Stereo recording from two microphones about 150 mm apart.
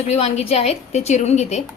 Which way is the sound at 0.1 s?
45° left (ahead or behind).